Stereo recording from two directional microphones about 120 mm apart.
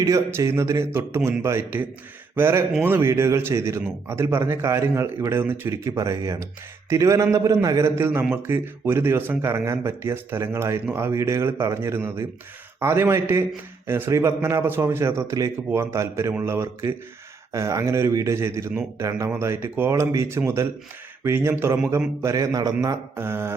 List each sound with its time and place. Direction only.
0.0 s speech: 25° right (ahead or behind)